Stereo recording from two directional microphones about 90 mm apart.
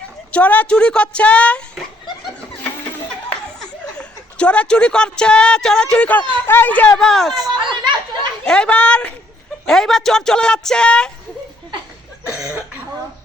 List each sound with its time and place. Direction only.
0.3 s speech: 15° left (ahead or behind)
3.9 s speech: 10° left (ahead or behind)
7.3 s a sound: 55° right (ahead or behind)
8.4 s speech: 10° left (ahead or behind)